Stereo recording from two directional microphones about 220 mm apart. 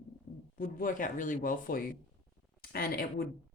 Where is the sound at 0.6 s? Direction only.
40° left (ahead or behind).